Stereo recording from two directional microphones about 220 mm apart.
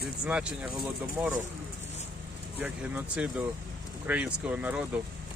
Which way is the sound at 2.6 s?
5° right (ahead or behind).